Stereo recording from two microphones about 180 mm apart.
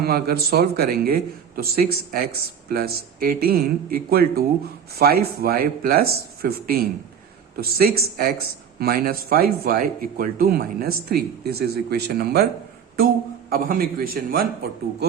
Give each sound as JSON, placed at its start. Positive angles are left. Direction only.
{"t": 0.0, "sound": "speech", "side_deg": -60}
{"t": 13.5, "sound": "speech", "side_deg": -55}